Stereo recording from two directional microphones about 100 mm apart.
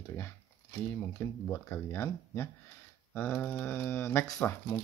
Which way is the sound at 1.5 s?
25° left (ahead or behind).